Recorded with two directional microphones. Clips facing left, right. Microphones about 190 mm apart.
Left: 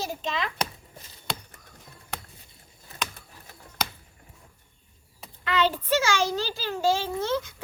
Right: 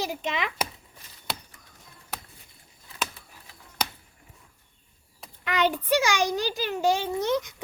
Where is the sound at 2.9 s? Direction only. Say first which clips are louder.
Right 1 dB; 45° left (ahead or behind).